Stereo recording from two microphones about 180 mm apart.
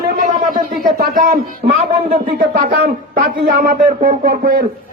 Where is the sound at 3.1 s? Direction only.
60° right (ahead or behind).